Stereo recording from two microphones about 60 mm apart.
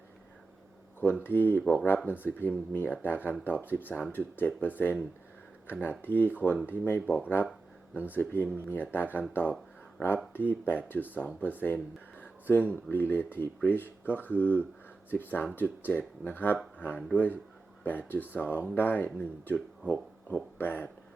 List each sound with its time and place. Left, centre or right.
1.2 s speech: left
19.9 s speech: left